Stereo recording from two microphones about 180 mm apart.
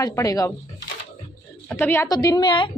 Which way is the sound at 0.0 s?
20° left (ahead or behind).